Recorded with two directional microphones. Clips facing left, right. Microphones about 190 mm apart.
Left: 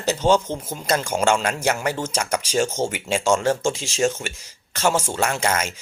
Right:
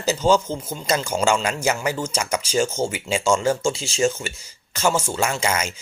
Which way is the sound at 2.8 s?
15° left (ahead or behind).